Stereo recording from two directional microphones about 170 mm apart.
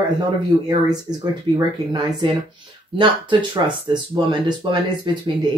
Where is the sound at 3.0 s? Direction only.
30° right (ahead or behind).